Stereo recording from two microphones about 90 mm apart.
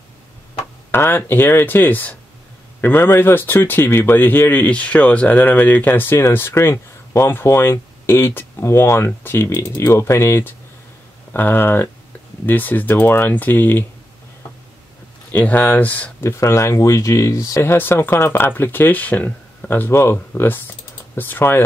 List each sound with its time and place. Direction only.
0.9 s speech: 25° left (ahead or behind)
15.3 s speech: 20° left (ahead or behind)
16.2 s speech: 30° left (ahead or behind)